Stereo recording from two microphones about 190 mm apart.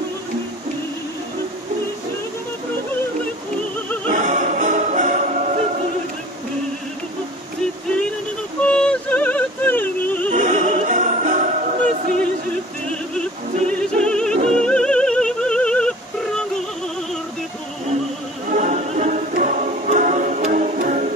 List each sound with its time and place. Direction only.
4.1 s music: 40° right (ahead or behind)
8.6 s yodeling: 5° left (ahead or behind)
10.3 s opera: 40° right (ahead or behind)
12.8 s opera: 5° left (ahead or behind)
14.3 s music: 35° right (ahead or behind)
14.6 s music: 5° left (ahead or behind)
18.5 s music: 40° right (ahead or behind)